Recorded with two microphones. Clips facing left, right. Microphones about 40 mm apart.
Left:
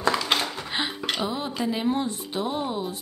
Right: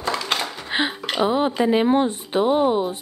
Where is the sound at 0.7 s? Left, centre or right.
Right.